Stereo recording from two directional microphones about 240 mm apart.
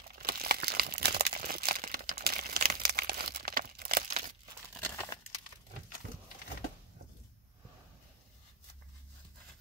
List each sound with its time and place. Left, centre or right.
0.2 s crumpling: right
4.7 s crumpling: centre